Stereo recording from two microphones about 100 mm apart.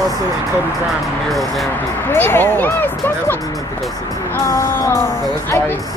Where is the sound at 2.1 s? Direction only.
20° left (ahead or behind).